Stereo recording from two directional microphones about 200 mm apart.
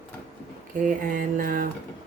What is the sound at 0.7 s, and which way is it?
Speech, 40° right (ahead or behind).